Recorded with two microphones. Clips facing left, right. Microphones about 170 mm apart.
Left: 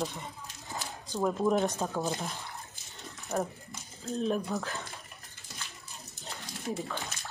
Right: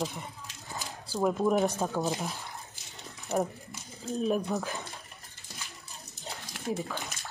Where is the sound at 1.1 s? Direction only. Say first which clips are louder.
Right 1 dB; 5° right (ahead or behind).